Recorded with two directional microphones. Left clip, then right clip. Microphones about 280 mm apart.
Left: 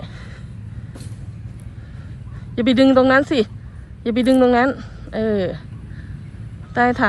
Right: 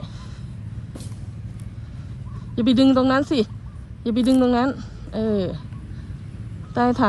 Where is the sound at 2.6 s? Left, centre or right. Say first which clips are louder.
Left 4 dB; centre.